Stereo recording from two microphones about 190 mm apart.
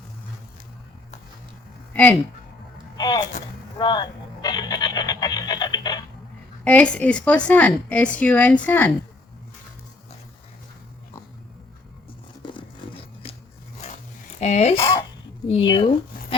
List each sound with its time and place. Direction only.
1.9 s a sound: 10° left (ahead or behind)
3.0 s a sound: 20° left (ahead or behind)
6.7 s a woman's voice: 5° left (ahead or behind)
12.4 s music: 25° left (ahead or behind)
13.8 s dog: 35° left (ahead or behind)
15.4 s speech: 30° left (ahead or behind)